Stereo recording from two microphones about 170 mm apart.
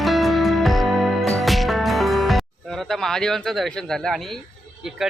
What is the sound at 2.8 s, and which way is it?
Speech, centre (ahead or behind).